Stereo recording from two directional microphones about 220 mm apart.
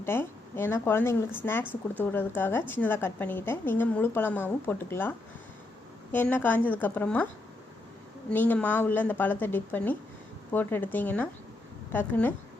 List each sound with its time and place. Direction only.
0.0 s a woman's voice: 10° left (ahead or behind)
8.3 s a woman's voice: 10° left (ahead or behind)